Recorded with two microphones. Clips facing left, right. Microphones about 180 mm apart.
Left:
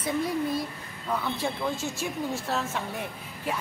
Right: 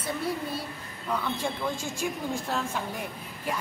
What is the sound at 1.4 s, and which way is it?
Speech, 10° right (ahead or behind).